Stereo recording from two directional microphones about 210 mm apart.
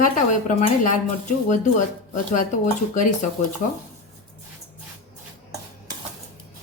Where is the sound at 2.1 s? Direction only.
35° left (ahead or behind).